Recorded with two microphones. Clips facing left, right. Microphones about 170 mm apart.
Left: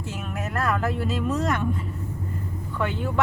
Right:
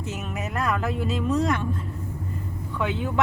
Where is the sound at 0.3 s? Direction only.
Centre (ahead or behind).